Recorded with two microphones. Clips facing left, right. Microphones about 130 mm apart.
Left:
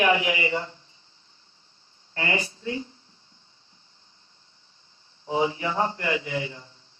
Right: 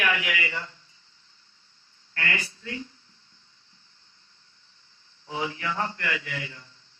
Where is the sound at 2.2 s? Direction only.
25° left (ahead or behind).